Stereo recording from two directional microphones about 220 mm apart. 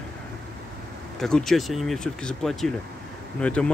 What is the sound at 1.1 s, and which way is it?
Speech, centre (ahead or behind).